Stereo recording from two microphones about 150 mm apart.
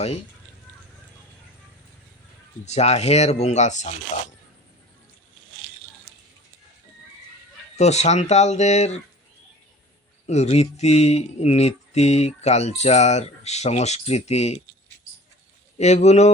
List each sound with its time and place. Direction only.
2.6 s speech: 45° left (ahead or behind)
7.8 s speech: 50° left (ahead or behind)
10.2 s speech: 45° left (ahead or behind)
15.8 s speech: 50° left (ahead or behind)